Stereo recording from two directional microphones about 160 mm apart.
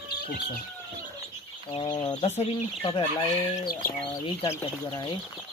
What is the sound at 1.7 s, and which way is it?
Speech, 35° left (ahead or behind).